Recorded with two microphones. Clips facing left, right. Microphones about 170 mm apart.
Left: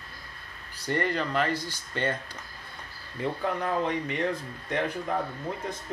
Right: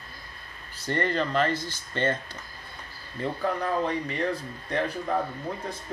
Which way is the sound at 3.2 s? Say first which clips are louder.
Right 1 dB; 15° left (ahead or behind).